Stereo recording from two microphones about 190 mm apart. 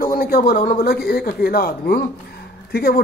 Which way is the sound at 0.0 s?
50° left (ahead or behind).